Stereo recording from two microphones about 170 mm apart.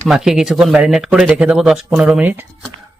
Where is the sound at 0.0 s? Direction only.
Centre (ahead or behind).